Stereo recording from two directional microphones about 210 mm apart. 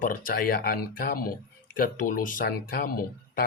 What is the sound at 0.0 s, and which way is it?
Speech, 40° left (ahead or behind).